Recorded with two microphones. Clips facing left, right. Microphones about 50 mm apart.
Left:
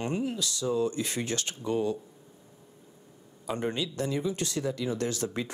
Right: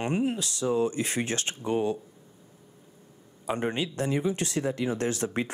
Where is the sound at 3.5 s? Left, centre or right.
Right.